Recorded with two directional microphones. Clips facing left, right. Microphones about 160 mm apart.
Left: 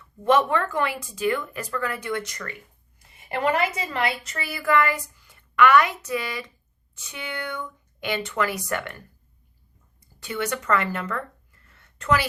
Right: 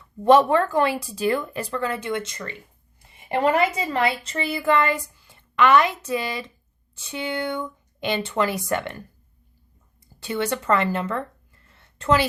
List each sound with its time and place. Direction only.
0.3 s a woman's voice: 35° right (ahead or behind)
10.2 s a woman's voice: 30° right (ahead or behind)